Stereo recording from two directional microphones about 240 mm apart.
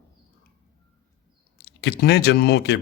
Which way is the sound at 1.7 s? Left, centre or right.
Left.